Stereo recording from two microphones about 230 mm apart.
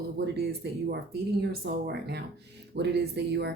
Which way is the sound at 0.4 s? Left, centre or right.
Right.